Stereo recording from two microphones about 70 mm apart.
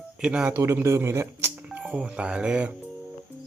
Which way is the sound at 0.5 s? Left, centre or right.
Right.